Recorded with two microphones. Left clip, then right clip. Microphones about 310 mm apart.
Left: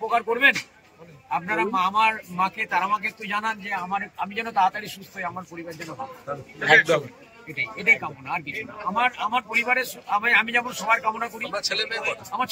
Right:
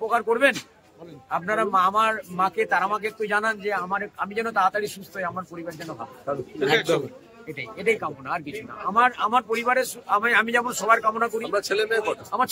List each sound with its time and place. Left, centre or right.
0.1 s a man's voice: centre
7.5 s a man's voice: centre